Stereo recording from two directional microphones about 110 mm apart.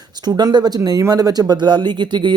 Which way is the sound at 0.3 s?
40° right (ahead or behind).